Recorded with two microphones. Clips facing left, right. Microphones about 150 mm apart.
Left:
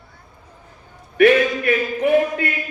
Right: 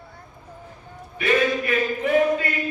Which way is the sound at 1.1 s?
65° left (ahead or behind).